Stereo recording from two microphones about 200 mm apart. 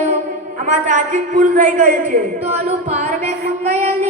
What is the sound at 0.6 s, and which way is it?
A man's voice, 40° right (ahead or behind).